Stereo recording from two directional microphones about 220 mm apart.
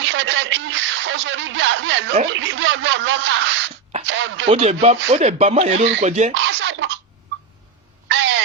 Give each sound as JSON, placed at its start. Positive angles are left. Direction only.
{"t": 0.0, "sound": "speech", "side_deg": -55}
{"t": 4.4, "sound": "speech", "side_deg": -25}
{"t": 6.3, "sound": "scratching", "side_deg": -60}
{"t": 8.0, "sound": "a sound", "side_deg": -55}